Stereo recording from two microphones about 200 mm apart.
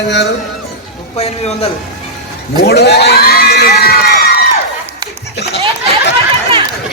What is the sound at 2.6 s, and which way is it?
Crowd, 55° left (ahead or behind).